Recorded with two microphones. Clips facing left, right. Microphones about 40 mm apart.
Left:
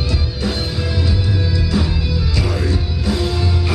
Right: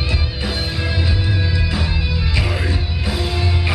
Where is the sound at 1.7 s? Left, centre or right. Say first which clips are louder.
Left 3 dB; right.